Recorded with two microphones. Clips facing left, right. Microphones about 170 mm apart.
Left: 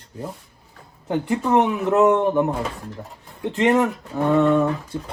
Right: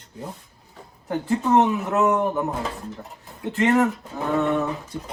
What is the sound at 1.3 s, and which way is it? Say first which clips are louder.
Speech: right 1 dB; 15° left (ahead or behind).